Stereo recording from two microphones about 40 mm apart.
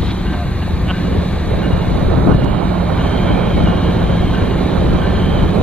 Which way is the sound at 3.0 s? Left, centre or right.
Centre.